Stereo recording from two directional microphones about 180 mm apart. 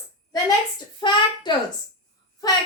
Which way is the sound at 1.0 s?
25° left (ahead or behind).